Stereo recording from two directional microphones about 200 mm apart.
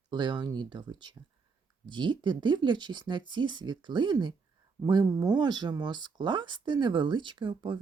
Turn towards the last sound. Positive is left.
turn(degrees=-25)  # may be behind; listen again after turning